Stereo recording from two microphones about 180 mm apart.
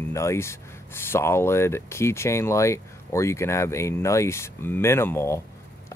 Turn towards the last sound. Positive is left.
turn(degrees=15)  # may be behind; listen again after turning